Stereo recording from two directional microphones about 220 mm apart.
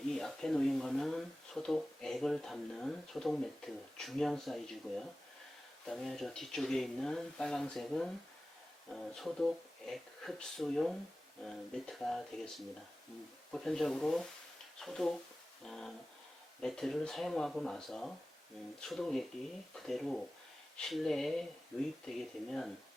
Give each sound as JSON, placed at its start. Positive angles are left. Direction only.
{"t": 0.1, "sound": "speech", "side_deg": 0}